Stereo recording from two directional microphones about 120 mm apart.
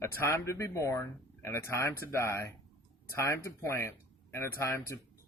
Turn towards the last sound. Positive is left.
turn(degrees=20)  # may be behind; listen again after turning